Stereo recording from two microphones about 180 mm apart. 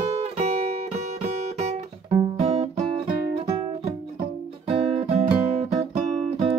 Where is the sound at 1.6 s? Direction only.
35° right (ahead or behind).